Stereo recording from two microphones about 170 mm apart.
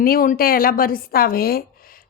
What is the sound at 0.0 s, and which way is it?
A woman's voice, 60° left (ahead or behind).